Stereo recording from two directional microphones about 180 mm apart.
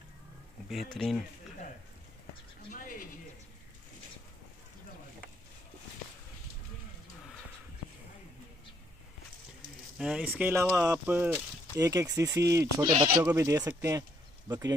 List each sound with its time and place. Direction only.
0.7 s speech: centre (ahead or behind)
2.7 s mechanisms: 50° left (ahead or behind)
9.9 s speech: 5° right (ahead or behind); by 14.6 s 20° right (ahead or behind)